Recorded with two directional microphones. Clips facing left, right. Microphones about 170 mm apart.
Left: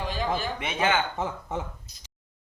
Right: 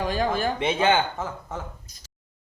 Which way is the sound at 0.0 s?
50° right (ahead or behind).